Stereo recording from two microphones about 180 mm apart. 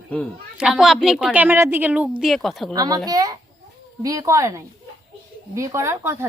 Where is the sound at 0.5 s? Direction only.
Centre (ahead or behind).